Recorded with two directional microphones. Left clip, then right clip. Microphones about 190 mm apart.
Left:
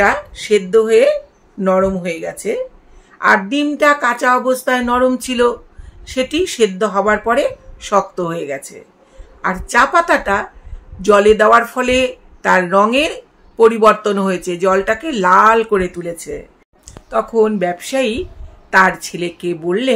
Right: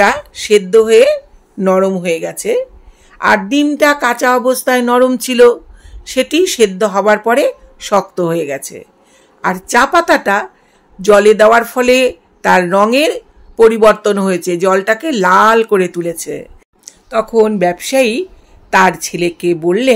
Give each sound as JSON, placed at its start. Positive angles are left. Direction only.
{"t": 0.0, "sound": "speech", "side_deg": -50}